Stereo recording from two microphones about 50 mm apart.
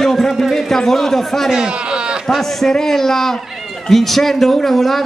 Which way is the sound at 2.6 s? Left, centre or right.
Centre.